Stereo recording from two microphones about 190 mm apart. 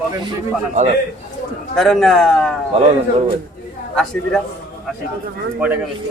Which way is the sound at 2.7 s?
35° right (ahead or behind).